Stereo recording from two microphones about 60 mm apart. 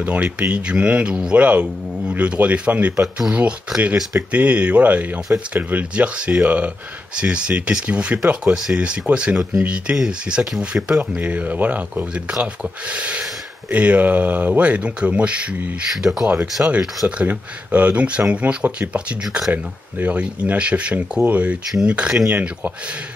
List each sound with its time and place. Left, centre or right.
0.0 s speech: right
15.9 s speech: centre
16.6 s speech: right; by 22.7 s centre